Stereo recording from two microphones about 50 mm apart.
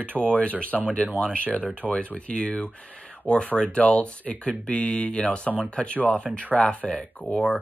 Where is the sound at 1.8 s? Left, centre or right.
Left.